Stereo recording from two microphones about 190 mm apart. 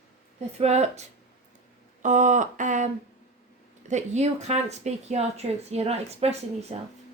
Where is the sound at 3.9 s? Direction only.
35° right (ahead or behind).